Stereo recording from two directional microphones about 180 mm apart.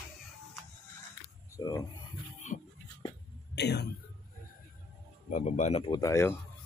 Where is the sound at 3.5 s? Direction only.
70° left (ahead or behind).